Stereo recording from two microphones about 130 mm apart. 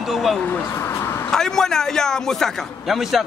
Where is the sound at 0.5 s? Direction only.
20° left (ahead or behind).